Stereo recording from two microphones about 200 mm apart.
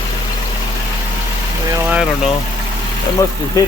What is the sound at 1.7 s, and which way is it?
Speech, 5° right (ahead or behind).